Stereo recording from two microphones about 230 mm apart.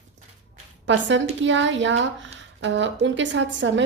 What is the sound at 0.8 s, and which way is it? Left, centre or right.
A woman's voice, right.